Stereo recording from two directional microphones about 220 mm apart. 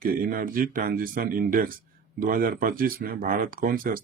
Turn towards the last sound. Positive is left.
turn(degrees=-40)  # may be behind; listen again after turning